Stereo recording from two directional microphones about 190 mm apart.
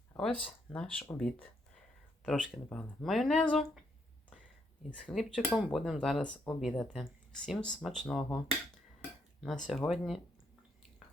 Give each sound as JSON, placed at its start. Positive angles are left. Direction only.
{"t": 0.2, "sound": "speech", "side_deg": 5}
{"t": 2.2, "sound": "speech", "side_deg": -5}
{"t": 5.0, "sound": "speech", "side_deg": 0}
{"t": 9.4, "sound": "speech", "side_deg": 0}